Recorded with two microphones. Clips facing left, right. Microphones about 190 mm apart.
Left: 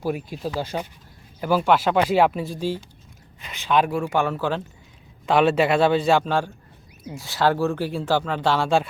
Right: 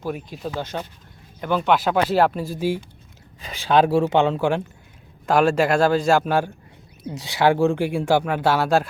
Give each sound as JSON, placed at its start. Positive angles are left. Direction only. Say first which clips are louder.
{"t": 0.0, "sound": "speech", "louder": "left 2 dB", "side_deg": 10}
{"t": 3.4, "sound": "speech", "louder": "right 3 dB", "side_deg": -35}
{"t": 5.2, "sound": "speech", "louder": "even", "side_deg": 0}